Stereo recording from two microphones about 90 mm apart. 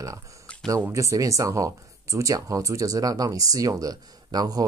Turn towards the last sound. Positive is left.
turn(degrees=-45)  # may be behind; listen again after turning